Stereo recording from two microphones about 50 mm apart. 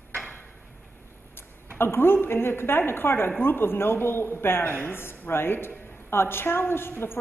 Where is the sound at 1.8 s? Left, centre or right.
Left.